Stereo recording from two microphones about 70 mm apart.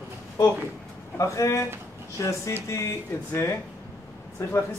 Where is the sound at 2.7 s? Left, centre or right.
Left.